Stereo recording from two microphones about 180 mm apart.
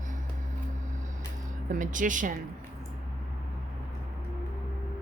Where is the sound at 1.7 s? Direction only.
45° right (ahead or behind).